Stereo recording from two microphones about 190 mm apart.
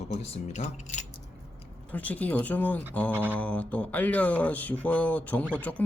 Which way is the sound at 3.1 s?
10° right (ahead or behind).